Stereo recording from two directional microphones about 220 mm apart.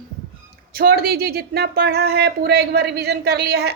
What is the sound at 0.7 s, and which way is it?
A woman's voice, 45° right (ahead or behind).